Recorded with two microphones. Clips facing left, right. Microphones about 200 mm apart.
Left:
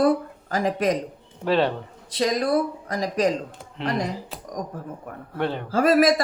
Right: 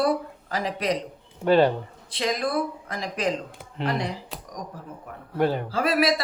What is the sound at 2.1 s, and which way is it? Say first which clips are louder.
Speech: left 5 dB; 40° left (ahead or behind).